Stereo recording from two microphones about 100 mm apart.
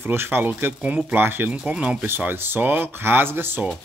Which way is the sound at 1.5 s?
10° right (ahead or behind).